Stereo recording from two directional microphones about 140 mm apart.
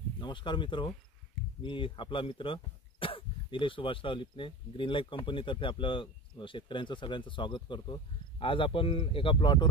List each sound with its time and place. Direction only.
0.2 s speech: 35° left (ahead or behind)